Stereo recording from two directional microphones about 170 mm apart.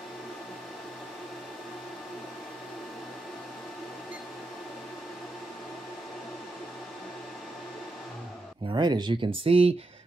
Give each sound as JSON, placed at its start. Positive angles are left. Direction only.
{"t": 8.7, "sound": "speech", "side_deg": -25}